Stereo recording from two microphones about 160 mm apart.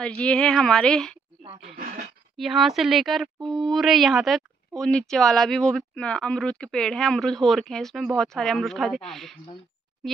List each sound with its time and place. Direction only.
0.2 s speech: 5° left (ahead or behind)
1.4 s a sound: 35° right (ahead or behind)
2.3 s speech: centre (ahead or behind)